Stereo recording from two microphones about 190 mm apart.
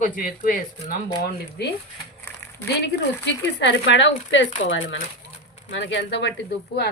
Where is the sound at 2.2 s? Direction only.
10° left (ahead or behind).